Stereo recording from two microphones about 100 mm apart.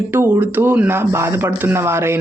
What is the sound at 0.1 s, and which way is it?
Speech, 20° right (ahead or behind).